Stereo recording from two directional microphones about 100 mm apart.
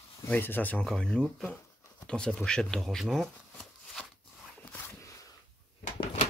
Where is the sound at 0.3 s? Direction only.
20° left (ahead or behind).